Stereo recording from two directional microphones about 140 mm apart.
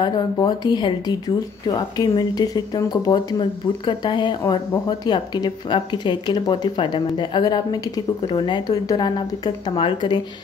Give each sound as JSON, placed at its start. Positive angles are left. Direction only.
{"t": 0.0, "sound": "speech", "side_deg": 30}